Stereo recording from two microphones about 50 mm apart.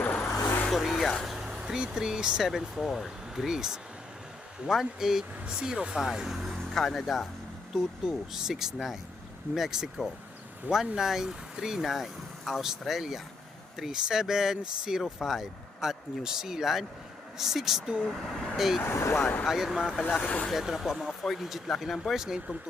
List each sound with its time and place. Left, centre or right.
0.7 s vehicle: centre
1.2 s speech: centre
2.5 s speech: centre
17.8 s speech: centre
18.9 s speech: left
19.5 s speech: centre
20.1 s speech: left
20.5 s speech: centre
22.1 s speech: centre